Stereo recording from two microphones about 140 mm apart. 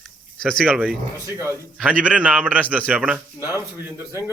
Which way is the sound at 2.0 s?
10° right (ahead or behind).